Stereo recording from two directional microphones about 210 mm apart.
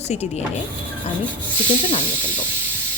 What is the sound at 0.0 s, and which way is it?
Speech, 30° left (ahead or behind).